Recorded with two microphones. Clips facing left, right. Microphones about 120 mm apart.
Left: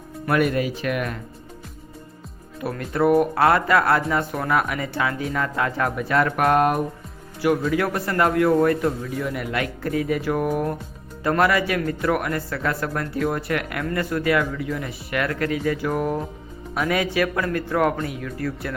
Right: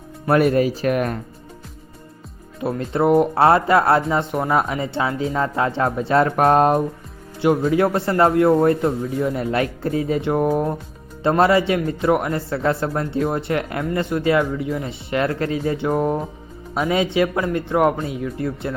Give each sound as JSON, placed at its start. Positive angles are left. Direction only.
{"t": 0.3, "sound": "speech", "side_deg": -35}
{"t": 2.6, "sound": "speech", "side_deg": -25}